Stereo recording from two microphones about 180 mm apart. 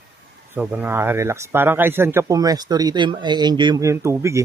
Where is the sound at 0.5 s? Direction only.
10° right (ahead or behind).